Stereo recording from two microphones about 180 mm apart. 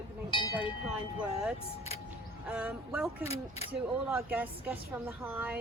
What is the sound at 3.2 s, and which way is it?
Speech, 35° left (ahead or behind).